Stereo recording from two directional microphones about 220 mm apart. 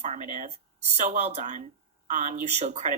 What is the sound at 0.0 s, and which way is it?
Speech, 30° right (ahead or behind).